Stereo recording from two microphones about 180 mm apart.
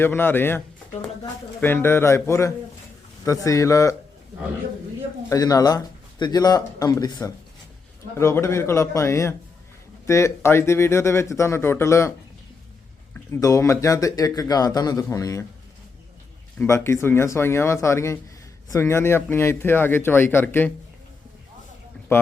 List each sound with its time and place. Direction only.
0.0 s speech: 10° left (ahead or behind)
5.3 s speech: 20° left (ahead or behind)
13.1 s speech: 15° left (ahead or behind)
16.6 s speech: 15° left (ahead or behind)